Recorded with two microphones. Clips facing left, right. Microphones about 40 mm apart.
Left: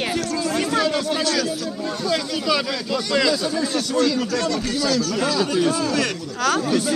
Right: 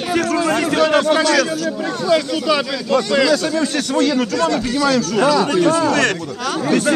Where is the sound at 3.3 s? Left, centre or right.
Right.